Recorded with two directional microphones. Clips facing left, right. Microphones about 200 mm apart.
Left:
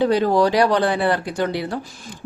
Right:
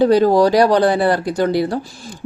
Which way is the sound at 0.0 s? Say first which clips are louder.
Right 5 dB; 40° right (ahead or behind).